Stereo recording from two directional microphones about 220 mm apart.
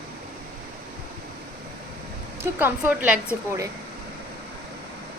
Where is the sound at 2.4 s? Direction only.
10° right (ahead or behind).